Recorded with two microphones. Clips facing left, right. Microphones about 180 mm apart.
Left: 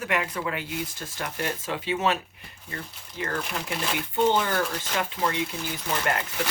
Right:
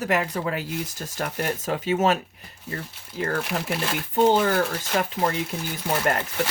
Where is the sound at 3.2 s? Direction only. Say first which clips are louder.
Right 4 dB; 40° right (ahead or behind).